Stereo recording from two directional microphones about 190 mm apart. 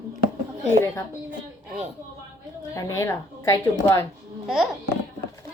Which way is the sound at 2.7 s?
15° left (ahead or behind).